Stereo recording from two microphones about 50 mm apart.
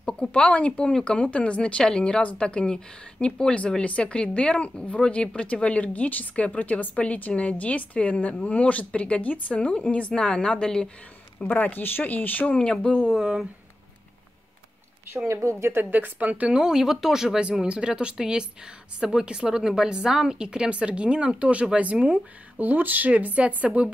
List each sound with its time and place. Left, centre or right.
0.0 s speech: centre
11.3 s speech: left
12.7 s speech: centre
13.2 s a woman's voice: centre
15.2 s a woman's voice: right
15.8 s speech: right
16.4 s a woman's voice: centre
17.4 s a woman's voice: right
22.6 s speech: right